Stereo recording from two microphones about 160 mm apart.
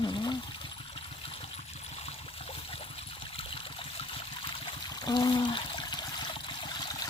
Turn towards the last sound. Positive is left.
turn(degrees=30)  # may be behind; listen again after turning